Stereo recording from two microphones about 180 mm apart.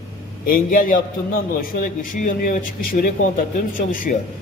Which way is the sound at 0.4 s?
50° left (ahead or behind).